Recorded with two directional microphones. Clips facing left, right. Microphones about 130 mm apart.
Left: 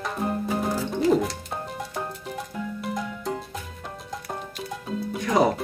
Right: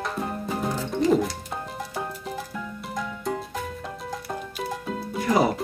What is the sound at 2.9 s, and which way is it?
Music, centre (ahead or behind).